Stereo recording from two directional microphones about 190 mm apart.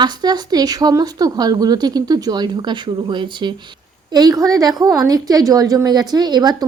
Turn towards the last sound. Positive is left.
turn(degrees=-20)  # may be behind; listen again after turning